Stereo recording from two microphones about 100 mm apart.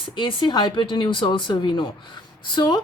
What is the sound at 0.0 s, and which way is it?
A woman's voice, 55° left (ahead or behind).